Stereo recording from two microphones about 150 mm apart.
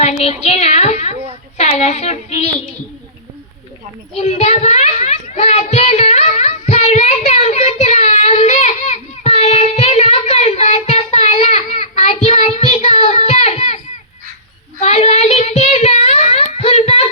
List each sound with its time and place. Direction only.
0.0 s speech: 45° left (ahead or behind)
1.8 s child singing: 50° left (ahead or behind)
4.1 s child singing: 50° left (ahead or behind)
14.8 s child singing: 50° left (ahead or behind)